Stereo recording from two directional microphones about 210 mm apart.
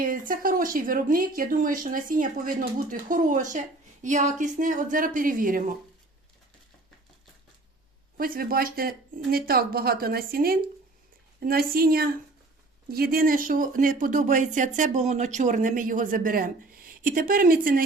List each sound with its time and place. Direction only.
0.0 s speech: 40° right (ahead or behind)
8.2 s speech: 45° right (ahead or behind)